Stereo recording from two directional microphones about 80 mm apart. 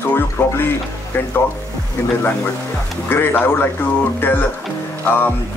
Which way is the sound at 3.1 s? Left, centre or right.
Left.